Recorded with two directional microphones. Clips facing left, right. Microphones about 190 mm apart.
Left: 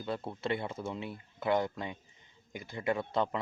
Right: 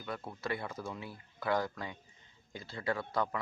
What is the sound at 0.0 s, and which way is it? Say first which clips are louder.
Speech: left 4 dB; 25° left (ahead or behind).